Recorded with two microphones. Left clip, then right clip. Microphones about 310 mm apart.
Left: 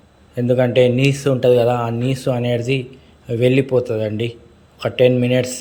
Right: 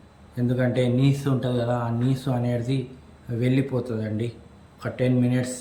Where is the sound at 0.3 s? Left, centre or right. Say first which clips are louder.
Left 10 dB; centre.